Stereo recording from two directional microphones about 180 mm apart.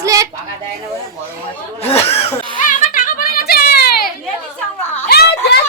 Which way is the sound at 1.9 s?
35° left (ahead or behind).